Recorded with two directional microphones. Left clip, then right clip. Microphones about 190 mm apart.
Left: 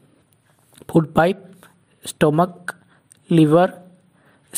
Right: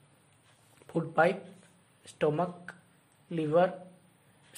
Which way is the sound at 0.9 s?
50° left (ahead or behind).